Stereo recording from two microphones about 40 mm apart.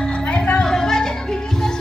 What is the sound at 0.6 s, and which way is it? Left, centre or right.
Music, centre.